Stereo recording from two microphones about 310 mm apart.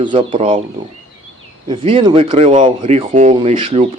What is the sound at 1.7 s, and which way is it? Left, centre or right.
Speech, centre.